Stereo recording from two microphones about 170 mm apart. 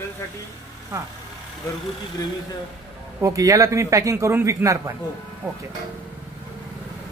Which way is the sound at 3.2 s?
20° right (ahead or behind).